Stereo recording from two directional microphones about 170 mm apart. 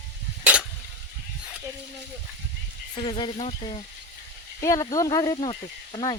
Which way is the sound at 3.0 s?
30° left (ahead or behind).